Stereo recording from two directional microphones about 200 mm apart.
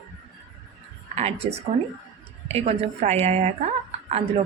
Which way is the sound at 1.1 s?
30° right (ahead or behind).